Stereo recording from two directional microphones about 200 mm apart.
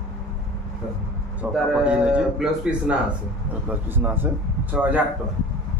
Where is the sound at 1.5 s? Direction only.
5° right (ahead or behind).